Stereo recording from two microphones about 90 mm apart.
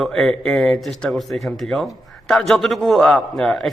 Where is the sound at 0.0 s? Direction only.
5° left (ahead or behind).